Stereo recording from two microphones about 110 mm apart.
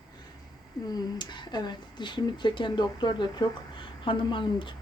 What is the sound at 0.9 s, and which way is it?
Speech, 45° left (ahead or behind).